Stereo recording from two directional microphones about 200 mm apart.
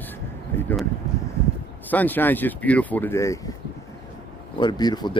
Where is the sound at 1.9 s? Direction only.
10° left (ahead or behind).